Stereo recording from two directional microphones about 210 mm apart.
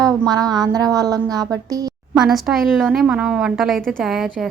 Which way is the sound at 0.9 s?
15° right (ahead or behind).